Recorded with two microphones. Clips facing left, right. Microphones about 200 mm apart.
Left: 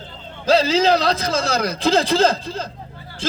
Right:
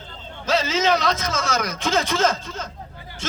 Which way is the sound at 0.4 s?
35° left (ahead or behind).